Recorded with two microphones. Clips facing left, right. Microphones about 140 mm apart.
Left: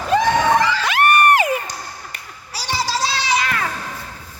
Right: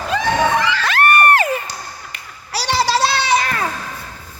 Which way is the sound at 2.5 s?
75° right (ahead or behind).